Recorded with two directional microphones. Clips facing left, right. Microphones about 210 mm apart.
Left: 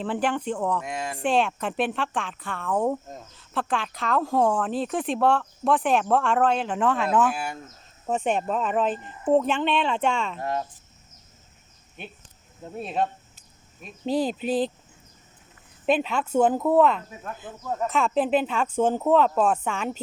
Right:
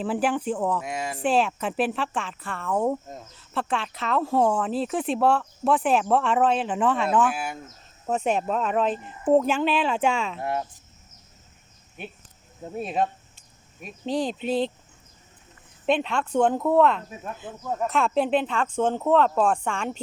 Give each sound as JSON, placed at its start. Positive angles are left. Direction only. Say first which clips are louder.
{"t": 0.0, "sound": "speech", "louder": "right 1 dB", "side_deg": -5}
{"t": 12.7, "sound": "speech", "louder": "right 1 dB", "side_deg": -5}
{"t": 14.0, "sound": "speech", "louder": "left 2 dB", "side_deg": 5}
{"t": 15.9, "sound": "speech", "louder": "left 1 dB", "side_deg": 5}